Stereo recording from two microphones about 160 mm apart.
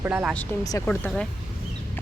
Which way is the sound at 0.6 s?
20° left (ahead or behind).